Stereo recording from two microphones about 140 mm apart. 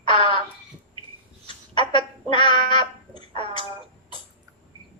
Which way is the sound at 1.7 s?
35° left (ahead or behind).